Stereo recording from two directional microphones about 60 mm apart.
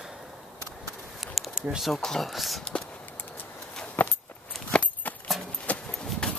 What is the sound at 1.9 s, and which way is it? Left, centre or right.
Speech, centre.